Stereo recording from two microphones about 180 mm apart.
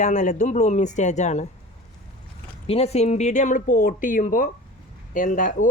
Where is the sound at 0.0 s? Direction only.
45° left (ahead or behind).